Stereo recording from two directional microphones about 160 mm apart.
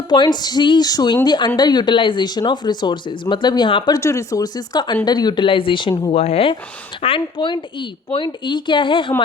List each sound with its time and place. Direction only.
0.1 s a woman's voice: 25° left (ahead or behind)
6.1 s a woman's voice: 40° left (ahead or behind)